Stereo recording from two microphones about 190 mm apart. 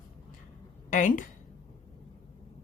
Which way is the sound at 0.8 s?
40° left (ahead or behind).